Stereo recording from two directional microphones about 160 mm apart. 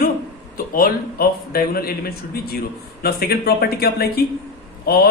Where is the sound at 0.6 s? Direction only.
65° left (ahead or behind).